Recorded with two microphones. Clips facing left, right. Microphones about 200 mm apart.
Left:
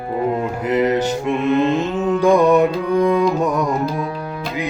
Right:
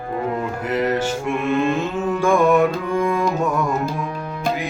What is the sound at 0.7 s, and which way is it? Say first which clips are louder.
Music: left 4 dB; 20° left (ahead or behind).